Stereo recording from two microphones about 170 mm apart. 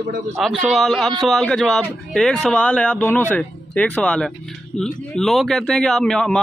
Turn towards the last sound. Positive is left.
turn(degrees=5)  # may be behind; listen again after turning